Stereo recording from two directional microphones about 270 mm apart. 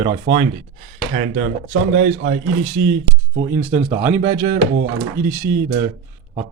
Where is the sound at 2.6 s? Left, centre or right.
Centre.